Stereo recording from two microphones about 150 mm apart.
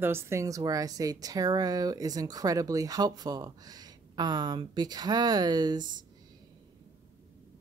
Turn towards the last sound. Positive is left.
turn(degrees=-30)  # may be behind; listen again after turning